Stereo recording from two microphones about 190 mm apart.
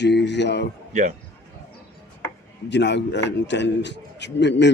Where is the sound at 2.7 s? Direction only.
65° left (ahead or behind).